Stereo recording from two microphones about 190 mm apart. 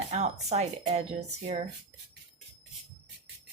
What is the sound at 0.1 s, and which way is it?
Speech, 35° right (ahead or behind).